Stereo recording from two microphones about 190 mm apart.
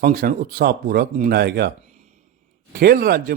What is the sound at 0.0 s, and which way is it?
A man's voice, 50° right (ahead or behind).